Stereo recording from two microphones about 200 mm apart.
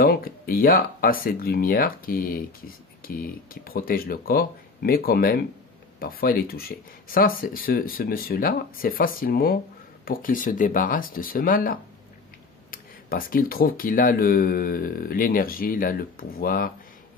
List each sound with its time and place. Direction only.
0.0 s speech: 45° left (ahead or behind)